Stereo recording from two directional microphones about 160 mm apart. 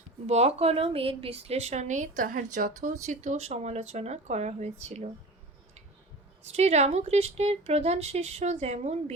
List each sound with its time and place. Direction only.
0.3 s a woman's voice: 40° right (ahead or behind)
6.5 s speech: 45° right (ahead or behind)